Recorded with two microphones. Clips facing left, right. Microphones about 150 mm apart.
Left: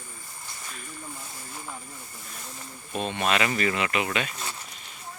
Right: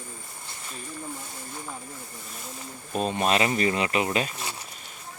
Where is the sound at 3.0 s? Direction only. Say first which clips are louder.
Right 2 dB; 40° right (ahead or behind).